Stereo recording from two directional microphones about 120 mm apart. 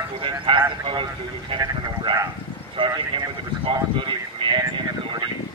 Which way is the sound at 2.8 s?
45° right (ahead or behind).